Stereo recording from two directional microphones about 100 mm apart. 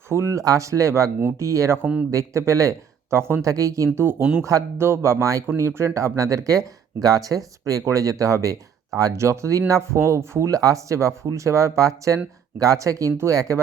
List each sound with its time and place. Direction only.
0.1 s speech: 30° right (ahead or behind)
4.2 s speech: 10° right (ahead or behind)
4.4 s speech: 30° right (ahead or behind)